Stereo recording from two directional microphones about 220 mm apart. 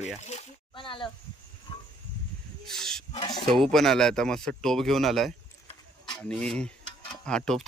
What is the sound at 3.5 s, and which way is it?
Speech, centre (ahead or behind).